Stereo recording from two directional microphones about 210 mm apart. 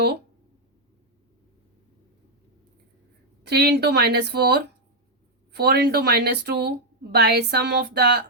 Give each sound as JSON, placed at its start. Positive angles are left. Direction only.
{"t": 3.4, "sound": "a woman's voice", "side_deg": -50}